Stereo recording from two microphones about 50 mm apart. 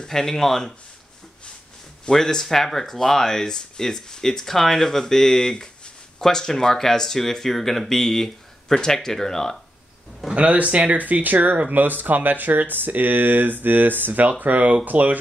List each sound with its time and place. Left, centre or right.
0.0 s speech: centre
2.0 s speech: centre
10.3 s speech: right